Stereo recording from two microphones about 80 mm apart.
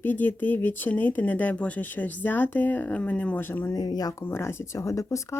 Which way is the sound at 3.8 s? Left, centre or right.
Left.